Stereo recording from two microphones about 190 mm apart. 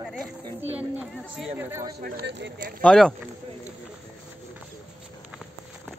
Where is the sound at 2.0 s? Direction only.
60° right (ahead or behind).